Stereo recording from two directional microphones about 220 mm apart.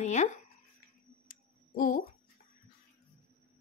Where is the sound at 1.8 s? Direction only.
40° left (ahead or behind).